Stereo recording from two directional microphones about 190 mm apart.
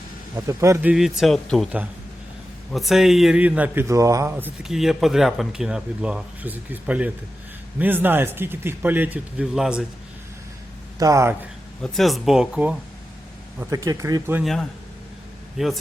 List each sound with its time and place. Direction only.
0.4 s a man's voice: 15° right (ahead or behind)
11.0 s a man's voice: 15° right (ahead or behind)
11.8 s speech: centre (ahead or behind)
13.6 s a man's voice: 15° right (ahead or behind)
14.4 s speech: centre (ahead or behind)